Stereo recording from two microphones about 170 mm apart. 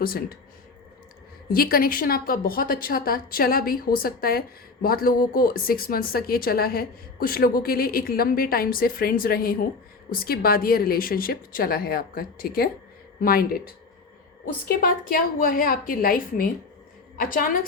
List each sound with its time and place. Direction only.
0.0 s a woman's voice: 60° left (ahead or behind)
1.5 s a woman's voice: 60° left (ahead or behind)